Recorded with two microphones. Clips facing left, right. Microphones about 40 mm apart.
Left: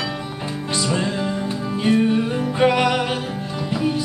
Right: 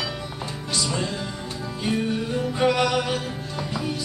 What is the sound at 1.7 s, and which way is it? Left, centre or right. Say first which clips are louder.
Music: left 7 dB; left.